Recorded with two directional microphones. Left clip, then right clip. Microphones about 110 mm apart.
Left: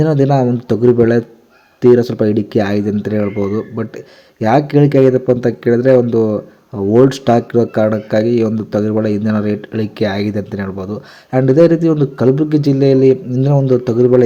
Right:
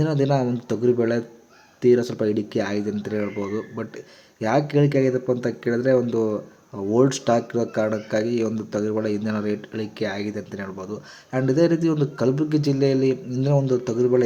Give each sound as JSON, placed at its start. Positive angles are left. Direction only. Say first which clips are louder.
{"t": 0.0, "sound": "speech", "louder": "left 9 dB", "side_deg": 45}